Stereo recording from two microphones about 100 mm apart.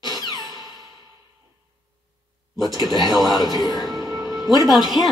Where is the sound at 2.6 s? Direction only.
45° left (ahead or behind).